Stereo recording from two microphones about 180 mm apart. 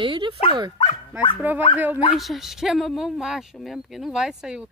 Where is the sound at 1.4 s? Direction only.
10° right (ahead or behind).